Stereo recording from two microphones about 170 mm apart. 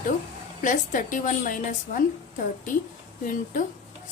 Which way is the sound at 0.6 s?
50° left (ahead or behind).